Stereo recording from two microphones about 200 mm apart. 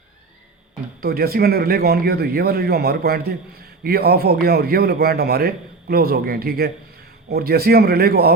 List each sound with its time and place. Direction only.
1.0 s a man's voice: 50° right (ahead or behind)